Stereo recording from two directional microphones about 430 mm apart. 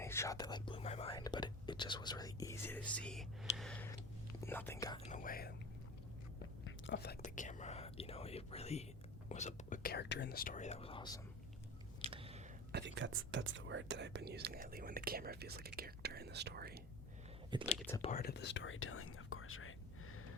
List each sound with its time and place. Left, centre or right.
0.0 s speech: centre
6.7 s whispering: left
9.3 s speech: centre
12.1 s whispering: centre
12.7 s speech: right
17.7 s speech: centre
18.1 s speech: left